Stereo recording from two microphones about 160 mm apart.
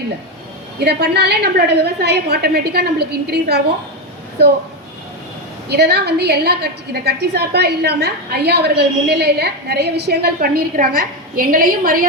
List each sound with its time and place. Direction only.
0.9 s a woman's voice: 90° right
5.6 s a woman's voice: 90° right; by 12.0 s 60° right (ahead or behind)